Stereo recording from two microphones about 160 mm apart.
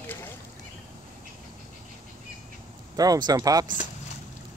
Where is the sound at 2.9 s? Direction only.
25° right (ahead or behind).